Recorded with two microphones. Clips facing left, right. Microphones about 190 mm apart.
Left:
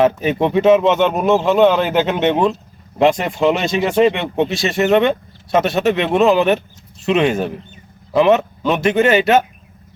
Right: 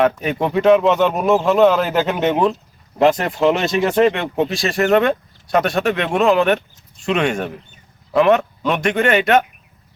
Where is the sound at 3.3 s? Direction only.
Centre (ahead or behind).